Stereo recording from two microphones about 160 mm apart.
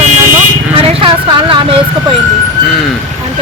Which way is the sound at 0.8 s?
35° right (ahead or behind).